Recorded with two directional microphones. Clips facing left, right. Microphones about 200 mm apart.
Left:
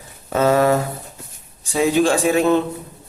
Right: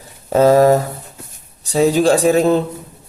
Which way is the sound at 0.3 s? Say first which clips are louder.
Right 5 dB; 35° right (ahead or behind).